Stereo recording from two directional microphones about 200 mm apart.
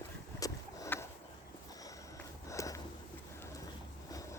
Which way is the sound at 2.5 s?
15° left (ahead or behind).